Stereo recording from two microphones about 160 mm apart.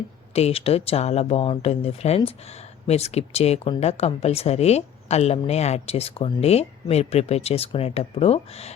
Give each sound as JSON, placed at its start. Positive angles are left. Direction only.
{"t": 0.3, "sound": "speech", "side_deg": 40}